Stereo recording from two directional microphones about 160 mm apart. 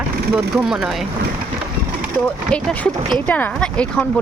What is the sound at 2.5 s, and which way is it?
Speech, 5° left (ahead or behind).